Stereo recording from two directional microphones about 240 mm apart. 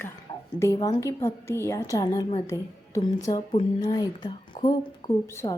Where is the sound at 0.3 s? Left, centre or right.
Centre.